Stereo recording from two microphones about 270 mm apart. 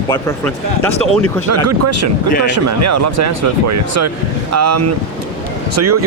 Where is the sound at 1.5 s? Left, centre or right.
Right.